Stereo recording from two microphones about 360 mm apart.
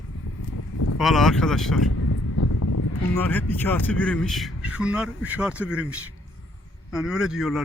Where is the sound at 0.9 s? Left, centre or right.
Centre.